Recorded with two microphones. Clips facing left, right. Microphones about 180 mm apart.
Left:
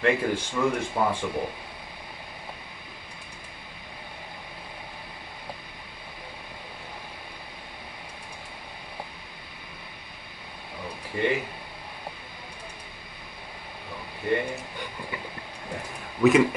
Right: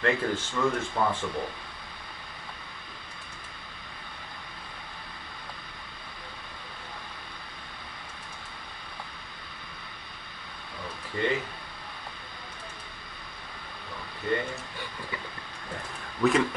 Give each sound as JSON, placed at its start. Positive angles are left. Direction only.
{"t": 0.0, "sound": "speech", "side_deg": 10}
{"t": 11.1, "sound": "speech", "side_deg": 10}
{"t": 14.3, "sound": "a sound", "side_deg": 15}
{"t": 16.2, "sound": "speech", "side_deg": 5}